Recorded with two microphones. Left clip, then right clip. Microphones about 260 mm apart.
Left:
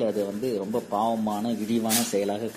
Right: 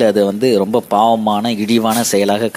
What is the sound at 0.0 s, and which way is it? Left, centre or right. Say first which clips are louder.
A man's voice: right 14 dB; right.